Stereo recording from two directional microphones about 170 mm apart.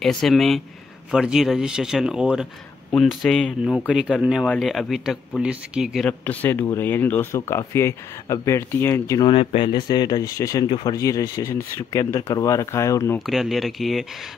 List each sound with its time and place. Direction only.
0.0 s speech: centre (ahead or behind)
6.0 s speech: 10° left (ahead or behind)
9.3 s speech: 30° left (ahead or behind)
13.2 s speech: centre (ahead or behind)